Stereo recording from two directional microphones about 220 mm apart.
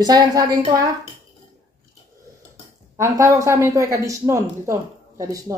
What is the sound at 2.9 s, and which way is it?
Speech, 15° right (ahead or behind).